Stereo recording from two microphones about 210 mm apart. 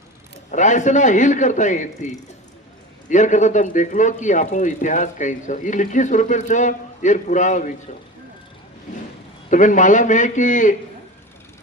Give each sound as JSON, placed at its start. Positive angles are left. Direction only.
{"t": 0.5, "sound": "speech", "side_deg": 35}
{"t": 8.9, "sound": "a sound", "side_deg": 40}
{"t": 9.5, "sound": "speech", "side_deg": 40}